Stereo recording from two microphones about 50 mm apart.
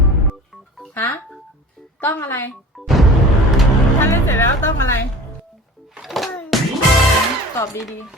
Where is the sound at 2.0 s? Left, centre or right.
Left.